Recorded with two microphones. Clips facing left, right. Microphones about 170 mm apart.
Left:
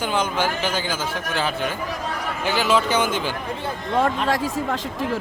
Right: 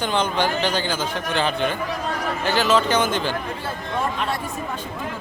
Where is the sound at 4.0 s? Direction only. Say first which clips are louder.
Left 5 dB; 90° left.